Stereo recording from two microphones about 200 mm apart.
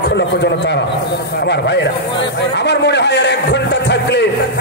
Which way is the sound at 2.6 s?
60° left (ahead or behind).